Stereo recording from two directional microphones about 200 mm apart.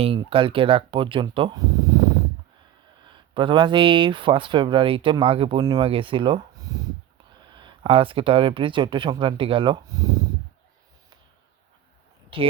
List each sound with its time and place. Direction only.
0.0 s speech: 25° right (ahead or behind)